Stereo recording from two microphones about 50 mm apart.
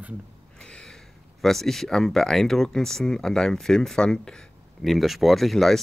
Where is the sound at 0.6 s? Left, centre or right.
Centre.